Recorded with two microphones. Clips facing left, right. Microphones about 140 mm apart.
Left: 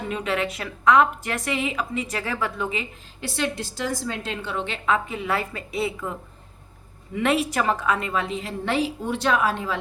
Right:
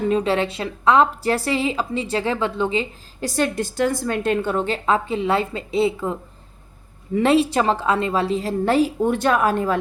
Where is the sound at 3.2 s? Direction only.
45° right (ahead or behind).